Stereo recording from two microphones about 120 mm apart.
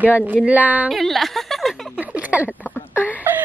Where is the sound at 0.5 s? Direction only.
15° right (ahead or behind).